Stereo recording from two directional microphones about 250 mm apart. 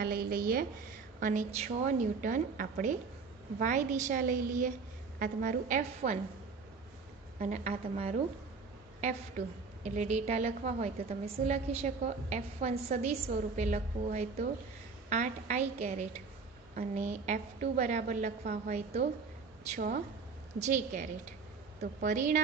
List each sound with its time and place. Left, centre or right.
0.0 s a woman's voice: right
7.3 s a woman's voice: right
9.4 s a woman's voice: right